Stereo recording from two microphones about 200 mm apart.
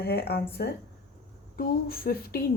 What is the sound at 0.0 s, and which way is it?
A woman's voice, 55° left (ahead or behind).